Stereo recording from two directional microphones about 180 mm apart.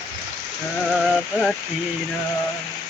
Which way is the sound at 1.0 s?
5° left (ahead or behind).